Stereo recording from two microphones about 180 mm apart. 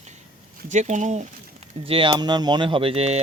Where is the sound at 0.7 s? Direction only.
40° right (ahead or behind).